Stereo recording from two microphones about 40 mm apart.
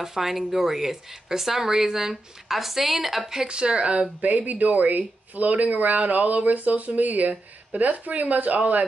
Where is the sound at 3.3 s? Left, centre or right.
Centre.